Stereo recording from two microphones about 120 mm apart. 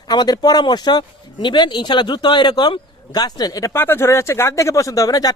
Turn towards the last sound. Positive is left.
turn(degrees=30)  # may be behind; listen again after turning